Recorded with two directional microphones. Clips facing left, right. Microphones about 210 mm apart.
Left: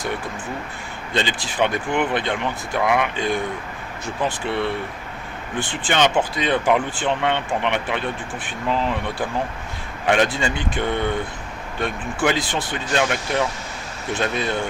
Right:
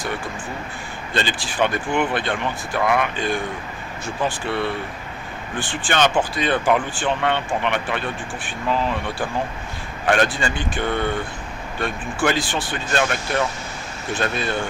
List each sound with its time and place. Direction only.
1.1 s speech: 20° left (ahead or behind)